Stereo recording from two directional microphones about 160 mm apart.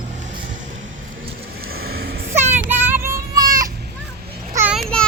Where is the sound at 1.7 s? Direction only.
80° right.